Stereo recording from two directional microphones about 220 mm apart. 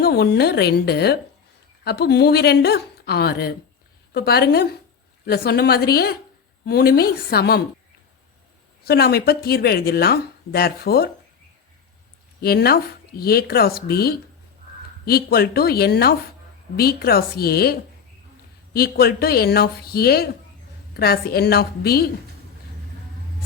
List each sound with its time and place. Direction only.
0.0 s speech: 45° left (ahead or behind)
8.8 s speech: 45° left (ahead or behind)
12.4 s speech: 45° left (ahead or behind)